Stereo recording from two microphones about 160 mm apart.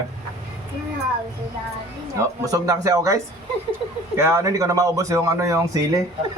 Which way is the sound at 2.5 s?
20° right (ahead or behind).